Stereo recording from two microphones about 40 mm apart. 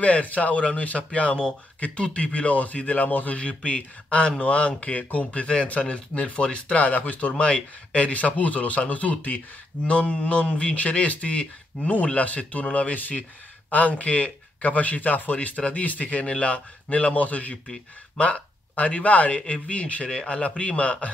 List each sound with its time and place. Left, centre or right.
0.0 s speech: left
3.3 s speech: left
6.9 s speech: left
15.3 s speech: left